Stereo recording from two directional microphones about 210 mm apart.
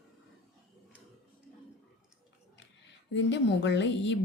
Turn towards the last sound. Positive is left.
turn(degrees=60)  # may be behind; listen again after turning